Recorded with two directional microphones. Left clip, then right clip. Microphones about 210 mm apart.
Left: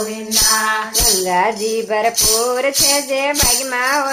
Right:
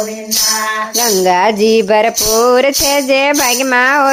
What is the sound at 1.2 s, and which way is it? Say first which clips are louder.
Speech: right 6 dB; 50° right (ahead or behind).